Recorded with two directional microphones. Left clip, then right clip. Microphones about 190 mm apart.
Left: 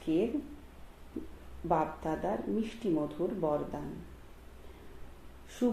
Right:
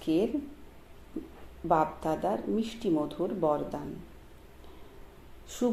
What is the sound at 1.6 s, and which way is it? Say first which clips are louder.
Speech: right 4 dB; 40° right (ahead or behind).